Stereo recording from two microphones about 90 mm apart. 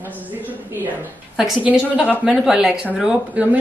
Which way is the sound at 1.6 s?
15° right (ahead or behind).